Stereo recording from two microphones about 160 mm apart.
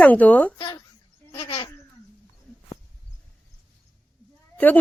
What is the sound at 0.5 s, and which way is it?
Speech, 25° left (ahead or behind).